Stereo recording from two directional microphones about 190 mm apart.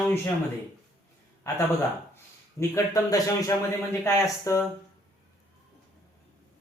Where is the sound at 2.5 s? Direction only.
15° left (ahead or behind).